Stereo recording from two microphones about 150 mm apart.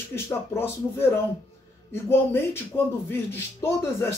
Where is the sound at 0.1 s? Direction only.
15° left (ahead or behind).